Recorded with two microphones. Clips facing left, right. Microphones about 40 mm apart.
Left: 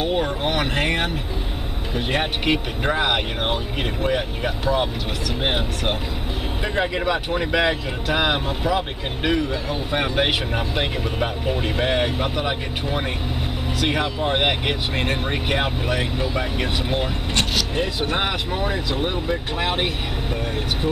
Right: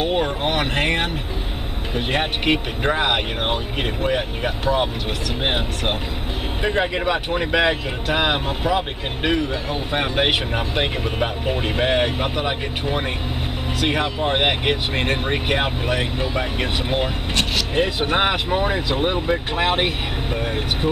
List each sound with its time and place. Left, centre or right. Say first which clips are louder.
0.0 s speech: right 1 dB; centre